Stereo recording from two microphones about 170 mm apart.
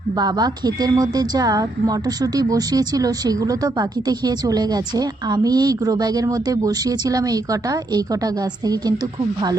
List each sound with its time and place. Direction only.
0.2 s a woman's voice: 25° right (ahead or behind)